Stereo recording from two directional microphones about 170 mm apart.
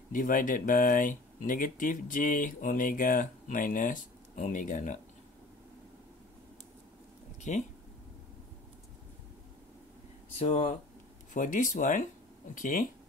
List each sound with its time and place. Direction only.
0.1 s speech: 50° left (ahead or behind)
7.5 s speech: 45° left (ahead or behind)
10.4 s speech: 40° left (ahead or behind)